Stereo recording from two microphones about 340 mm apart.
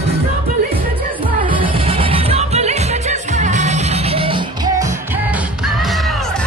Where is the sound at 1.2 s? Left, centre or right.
Centre.